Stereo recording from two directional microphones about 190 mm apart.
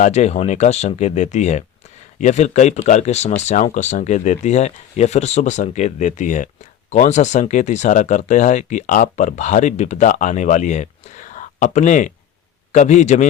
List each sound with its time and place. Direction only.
0.0 s speech: 35° left (ahead or behind)